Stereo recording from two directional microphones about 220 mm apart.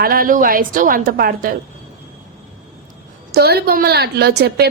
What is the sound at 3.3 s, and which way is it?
A woman's voice, 45° right (ahead or behind).